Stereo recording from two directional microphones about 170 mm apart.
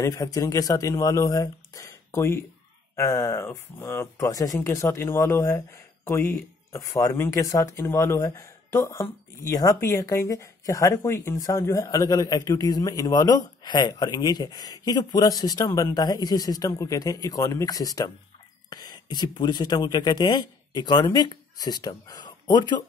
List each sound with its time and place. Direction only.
0.0 s speech: 20° left (ahead or behind)